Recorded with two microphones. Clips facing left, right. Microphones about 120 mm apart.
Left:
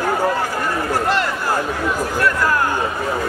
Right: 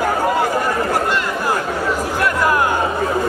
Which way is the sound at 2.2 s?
15° right (ahead or behind).